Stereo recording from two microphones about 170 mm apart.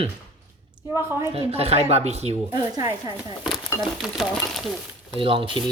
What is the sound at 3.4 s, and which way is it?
Speech, centre (ahead or behind).